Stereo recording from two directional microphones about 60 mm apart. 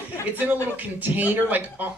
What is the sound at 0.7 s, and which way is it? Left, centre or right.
Speech, right.